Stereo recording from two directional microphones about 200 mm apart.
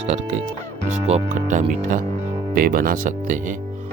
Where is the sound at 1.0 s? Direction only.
35° right (ahead or behind).